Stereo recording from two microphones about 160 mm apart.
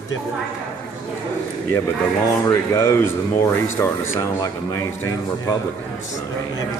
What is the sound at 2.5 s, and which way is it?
Speech, 20° left (ahead or behind).